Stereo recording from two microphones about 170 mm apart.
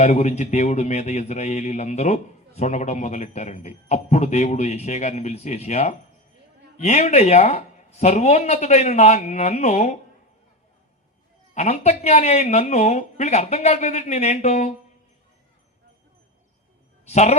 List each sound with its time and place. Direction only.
0.0 s a man's voice: 40° left (ahead or behind)
11.5 s a man's voice: 40° left (ahead or behind)
17.1 s a man's voice: 40° left (ahead or behind)